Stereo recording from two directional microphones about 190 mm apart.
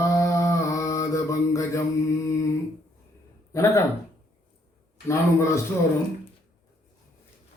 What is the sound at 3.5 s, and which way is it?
Speech, 15° left (ahead or behind).